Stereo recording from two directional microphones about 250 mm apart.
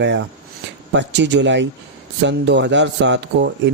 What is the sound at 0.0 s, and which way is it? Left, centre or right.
Speech, right.